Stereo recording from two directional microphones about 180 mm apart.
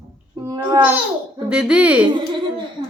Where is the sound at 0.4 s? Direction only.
20° right (ahead or behind).